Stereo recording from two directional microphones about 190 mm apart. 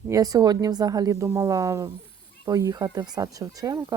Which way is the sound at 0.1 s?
20° right (ahead or behind).